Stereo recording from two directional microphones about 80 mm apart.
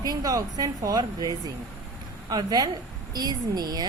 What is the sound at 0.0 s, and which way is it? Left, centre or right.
A woman's voice, right.